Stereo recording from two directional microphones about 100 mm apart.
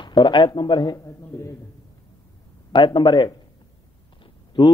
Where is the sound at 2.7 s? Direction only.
50° left (ahead or behind).